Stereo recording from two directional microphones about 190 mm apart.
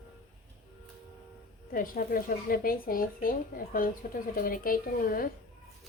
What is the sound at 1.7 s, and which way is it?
Speech, 50° left (ahead or behind).